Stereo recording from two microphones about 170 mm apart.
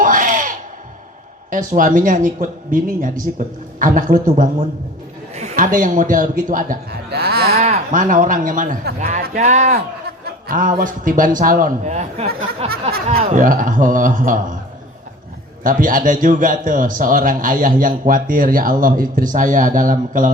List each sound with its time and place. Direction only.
0.0 s a sound: 50° right (ahead or behind)
1.5 s a man's voice: 50° right (ahead or behind)
7.6 s a sound: 40° right (ahead or behind)
8.0 s a man's voice: 50° right (ahead or behind)
13.1 s a man's voice: 55° right (ahead or behind)
15.6 s a man's voice: 55° right (ahead or behind)